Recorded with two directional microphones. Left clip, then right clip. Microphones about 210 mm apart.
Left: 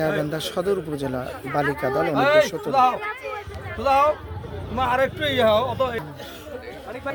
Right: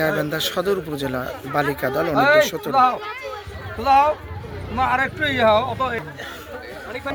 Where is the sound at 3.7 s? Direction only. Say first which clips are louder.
Right 3 dB; 60° left (ahead or behind).